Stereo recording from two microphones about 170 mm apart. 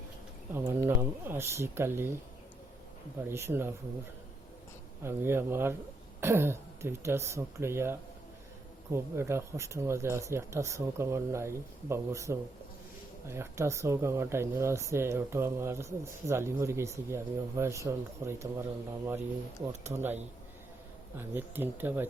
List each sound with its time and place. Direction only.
0.5 s speech: 15° right (ahead or behind)
3.2 s speech: 15° right (ahead or behind)
5.0 s speech: 15° right (ahead or behind)
19.9 s speech: 10° right (ahead or behind)
21.2 s speech: 10° right (ahead or behind)